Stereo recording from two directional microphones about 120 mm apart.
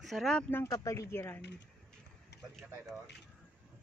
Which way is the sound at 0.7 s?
30° left (ahead or behind).